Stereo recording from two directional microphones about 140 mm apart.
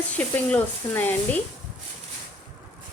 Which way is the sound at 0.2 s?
10° left (ahead or behind).